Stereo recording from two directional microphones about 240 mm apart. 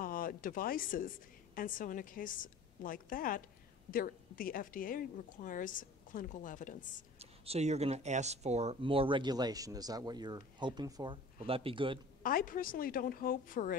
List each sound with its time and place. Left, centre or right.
0.0 s a woman's voice: left
7.2 s speech: right
12.2 s a woman's voice: left